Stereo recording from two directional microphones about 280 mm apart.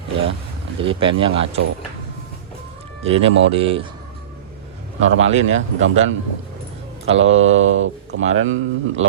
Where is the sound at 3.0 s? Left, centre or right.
Right.